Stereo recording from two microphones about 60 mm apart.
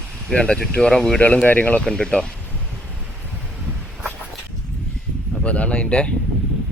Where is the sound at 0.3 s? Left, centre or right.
Centre.